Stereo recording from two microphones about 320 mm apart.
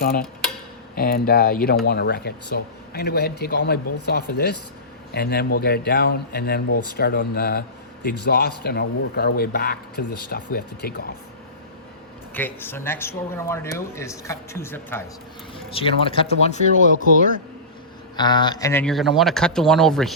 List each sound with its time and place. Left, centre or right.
0.0 s speech: left
5.1 s speech: left
12.3 s speech: centre; by 17.1 s left
18.2 s speech: centre